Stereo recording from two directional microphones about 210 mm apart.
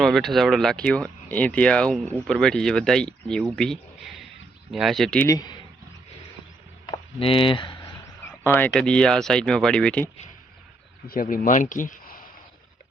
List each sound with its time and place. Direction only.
0.0 s a man's voice: centre (ahead or behind)
5.3 s a man's voice: 20° left (ahead or behind)
6.8 s a sound: 25° left (ahead or behind)
8.2 s speech: 10° left (ahead or behind)
11.1 s speech: 40° left (ahead or behind)